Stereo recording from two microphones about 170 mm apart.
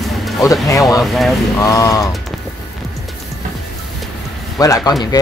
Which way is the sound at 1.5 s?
20° left (ahead or behind).